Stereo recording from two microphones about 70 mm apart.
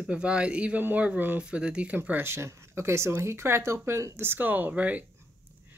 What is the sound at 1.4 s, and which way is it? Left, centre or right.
Speech, centre.